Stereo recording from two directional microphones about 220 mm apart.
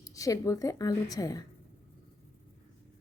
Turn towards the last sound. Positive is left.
turn(degrees=15)  # may be behind; listen again after turning